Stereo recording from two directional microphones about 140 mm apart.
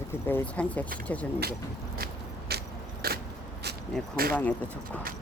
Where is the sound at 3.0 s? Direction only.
90° right.